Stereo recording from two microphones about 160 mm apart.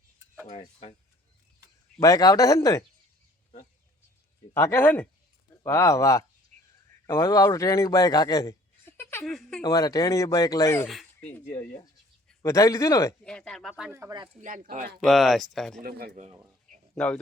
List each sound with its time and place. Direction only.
0.5 s speech: 35° left (ahead or behind)
2.0 s speech: 20° left (ahead or behind)
4.5 s a man's voice: 15° left (ahead or behind)
9.2 s speech: centre (ahead or behind)
9.6 s speech: 25° left (ahead or behind)
12.4 s speech: 20° left (ahead or behind)
13.2 s speech: 5° left (ahead or behind)
13.9 s speech: 20° right (ahead or behind)
14.4 s speech: 55° right (ahead or behind)
15.0 s speech: centre (ahead or behind)
15.8 s speech: 75° right (ahead or behind)
16.9 s speech: 5° left (ahead or behind)